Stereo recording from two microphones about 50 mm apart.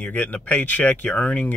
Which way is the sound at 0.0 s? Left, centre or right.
Left.